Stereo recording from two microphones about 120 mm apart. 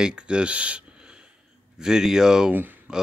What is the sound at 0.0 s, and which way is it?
Speech, 10° right (ahead or behind).